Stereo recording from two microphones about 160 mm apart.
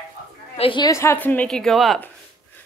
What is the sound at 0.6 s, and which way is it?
Speech, 30° left (ahead or behind).